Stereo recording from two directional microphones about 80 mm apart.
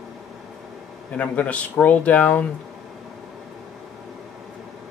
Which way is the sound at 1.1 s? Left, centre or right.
Centre.